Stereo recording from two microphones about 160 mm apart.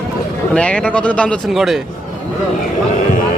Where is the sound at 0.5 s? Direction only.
5° left (ahead or behind).